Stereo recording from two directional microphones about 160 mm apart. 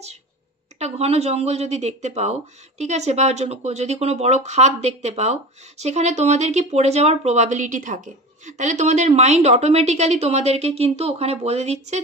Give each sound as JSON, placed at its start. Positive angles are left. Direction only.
{"t": 0.7, "sound": "speech", "side_deg": -40}